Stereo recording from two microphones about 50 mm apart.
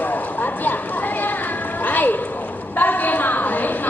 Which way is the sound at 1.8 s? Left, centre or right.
Left.